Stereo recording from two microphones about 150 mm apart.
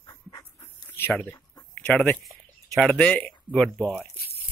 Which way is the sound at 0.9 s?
15° left (ahead or behind).